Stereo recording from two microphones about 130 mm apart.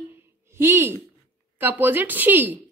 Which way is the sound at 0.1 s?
20° right (ahead or behind).